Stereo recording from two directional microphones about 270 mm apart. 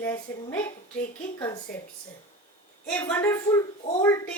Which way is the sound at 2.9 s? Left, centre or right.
Centre.